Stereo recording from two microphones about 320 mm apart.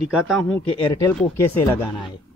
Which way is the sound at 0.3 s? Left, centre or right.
Centre.